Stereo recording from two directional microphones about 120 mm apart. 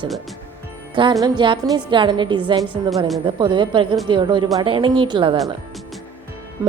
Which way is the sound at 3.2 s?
45° right (ahead or behind).